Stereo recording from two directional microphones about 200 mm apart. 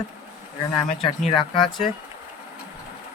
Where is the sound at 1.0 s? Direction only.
25° left (ahead or behind).